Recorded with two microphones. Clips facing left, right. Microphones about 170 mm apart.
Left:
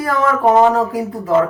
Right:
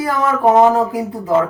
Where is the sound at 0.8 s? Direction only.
20° right (ahead or behind).